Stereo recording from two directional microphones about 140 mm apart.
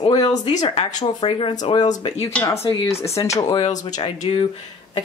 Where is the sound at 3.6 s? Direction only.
60° left (ahead or behind).